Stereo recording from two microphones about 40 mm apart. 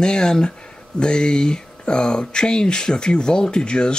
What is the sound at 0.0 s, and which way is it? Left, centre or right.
Speech, centre.